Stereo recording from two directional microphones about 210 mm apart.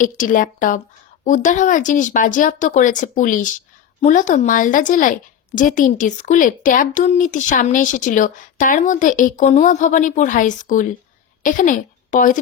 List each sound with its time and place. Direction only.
0.0 s a woman's voice: 40° left (ahead or behind)